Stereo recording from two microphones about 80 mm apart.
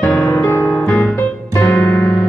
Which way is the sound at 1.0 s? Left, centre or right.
Left.